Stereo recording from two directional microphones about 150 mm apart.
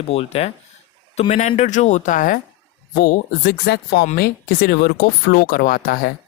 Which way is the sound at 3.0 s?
70° left (ahead or behind).